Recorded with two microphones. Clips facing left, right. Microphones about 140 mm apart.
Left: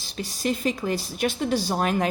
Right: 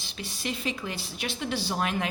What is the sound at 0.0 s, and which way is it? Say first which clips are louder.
A woman's voice: left 7 dB; 40° left (ahead or behind).